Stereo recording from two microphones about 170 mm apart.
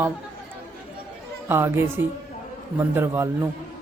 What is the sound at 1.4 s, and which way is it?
Speech, 15° right (ahead or behind).